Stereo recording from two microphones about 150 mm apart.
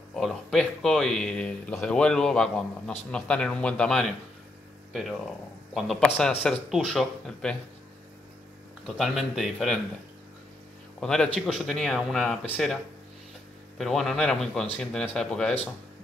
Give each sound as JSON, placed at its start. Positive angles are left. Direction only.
{"t": 0.1, "sound": "speech", "side_deg": 0}
{"t": 5.8, "sound": "speech", "side_deg": 0}
{"t": 8.8, "sound": "speech", "side_deg": 0}
{"t": 11.0, "sound": "speech", "side_deg": 5}
{"t": 13.7, "sound": "speech", "side_deg": 0}